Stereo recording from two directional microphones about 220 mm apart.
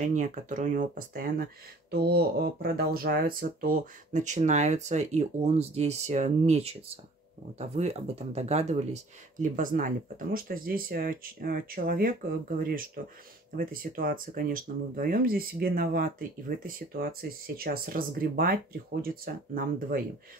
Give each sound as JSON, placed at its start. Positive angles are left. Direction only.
{"t": 0.0, "sound": "speech", "side_deg": -35}